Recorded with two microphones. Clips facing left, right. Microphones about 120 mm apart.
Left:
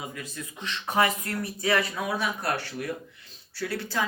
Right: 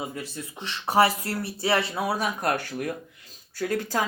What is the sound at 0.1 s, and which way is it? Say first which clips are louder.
Speech: right 3 dB; 30° right (ahead or behind).